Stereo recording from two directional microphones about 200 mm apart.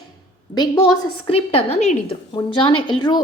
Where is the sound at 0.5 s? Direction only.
20° left (ahead or behind).